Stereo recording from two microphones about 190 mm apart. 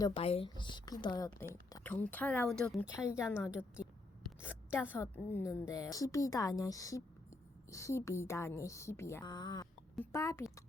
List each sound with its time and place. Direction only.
0.0 s speech: 30° left (ahead or behind)
1.7 s a woman's voice: 10° left (ahead or behind)
3.2 s a woman's voice: 15° left (ahead or behind)
4.8 s a woman's voice: 10° left (ahead or behind)
9.9 s a woman's voice: 10° left (ahead or behind)